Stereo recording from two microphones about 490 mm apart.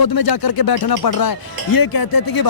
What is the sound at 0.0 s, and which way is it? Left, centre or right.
Speech, left.